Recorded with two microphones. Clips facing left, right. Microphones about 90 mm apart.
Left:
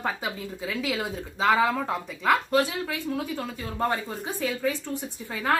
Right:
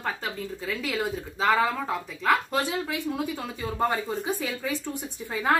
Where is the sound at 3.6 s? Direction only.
10° right (ahead or behind).